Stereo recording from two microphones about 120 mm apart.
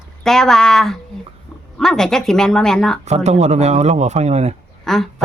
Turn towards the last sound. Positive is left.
turn(degrees=0)  # may be behind; listen again after turning